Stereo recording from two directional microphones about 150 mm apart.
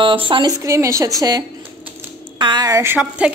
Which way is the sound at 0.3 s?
30° right (ahead or behind).